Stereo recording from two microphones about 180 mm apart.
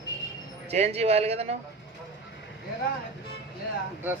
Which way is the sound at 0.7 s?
35° right (ahead or behind).